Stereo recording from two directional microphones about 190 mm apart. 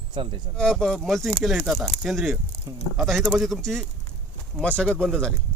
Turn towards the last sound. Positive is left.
turn(degrees=5)  # may be behind; listen again after turning